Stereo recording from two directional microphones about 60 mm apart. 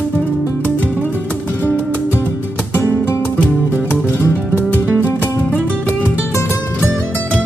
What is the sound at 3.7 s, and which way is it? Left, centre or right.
Music, right.